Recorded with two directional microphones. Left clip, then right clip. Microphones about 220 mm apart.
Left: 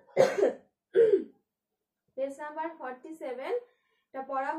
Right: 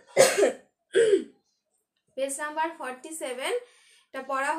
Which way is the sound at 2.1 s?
5° right (ahead or behind).